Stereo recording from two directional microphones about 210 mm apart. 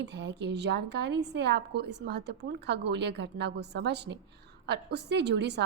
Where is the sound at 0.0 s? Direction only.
55° right (ahead or behind).